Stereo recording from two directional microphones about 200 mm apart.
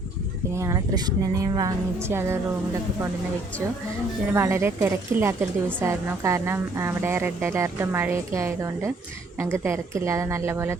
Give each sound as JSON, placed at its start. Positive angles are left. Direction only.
{"t": 0.5, "sound": "a woman's voice", "side_deg": -15}
{"t": 4.3, "sound": "a woman's voice", "side_deg": -10}